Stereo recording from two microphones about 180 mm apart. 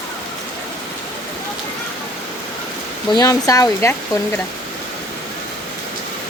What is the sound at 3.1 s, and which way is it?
Speech, 20° left (ahead or behind).